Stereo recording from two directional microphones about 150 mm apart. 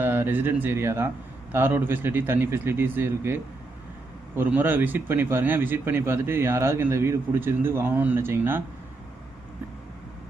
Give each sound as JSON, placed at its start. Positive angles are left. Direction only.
{"t": 0.0, "sound": "speech", "side_deg": -15}